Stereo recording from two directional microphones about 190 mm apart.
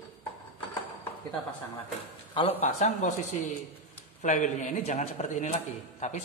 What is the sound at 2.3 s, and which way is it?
Speech, 30° left (ahead or behind).